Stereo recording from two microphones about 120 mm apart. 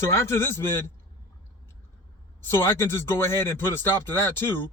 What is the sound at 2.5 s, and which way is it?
A man's voice, 20° left (ahead or behind).